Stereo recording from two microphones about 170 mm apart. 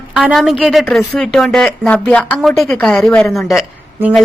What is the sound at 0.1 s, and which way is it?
A woman's voice, centre (ahead or behind).